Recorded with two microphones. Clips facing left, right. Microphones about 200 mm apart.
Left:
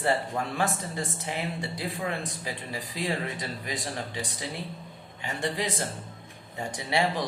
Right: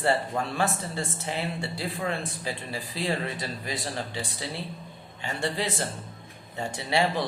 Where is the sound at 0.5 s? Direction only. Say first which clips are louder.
Even; 15° left (ahead or behind).